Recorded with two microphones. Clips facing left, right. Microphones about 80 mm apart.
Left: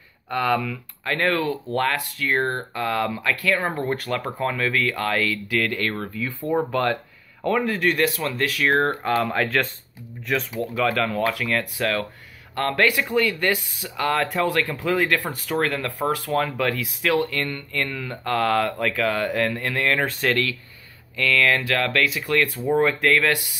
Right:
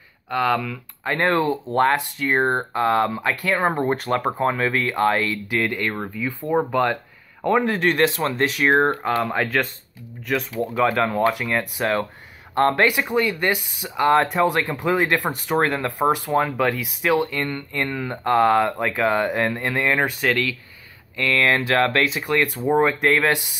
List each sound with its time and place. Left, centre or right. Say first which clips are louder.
0.3 s speech: right 1 dB; centre
1.0 s speech: right 3 dB; right
10.6 s speech: right 4 dB; right
21.2 s speech: right 1 dB; right